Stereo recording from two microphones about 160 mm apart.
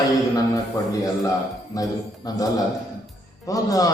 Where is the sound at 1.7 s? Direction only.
20° left (ahead or behind).